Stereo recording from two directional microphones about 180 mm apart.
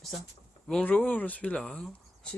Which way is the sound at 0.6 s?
5° left (ahead or behind).